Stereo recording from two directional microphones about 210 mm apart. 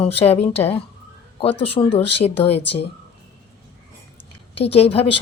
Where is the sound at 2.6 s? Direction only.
55° left (ahead or behind).